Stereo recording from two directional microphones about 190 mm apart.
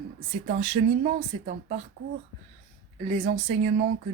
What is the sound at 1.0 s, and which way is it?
Speech, 50° right (ahead or behind).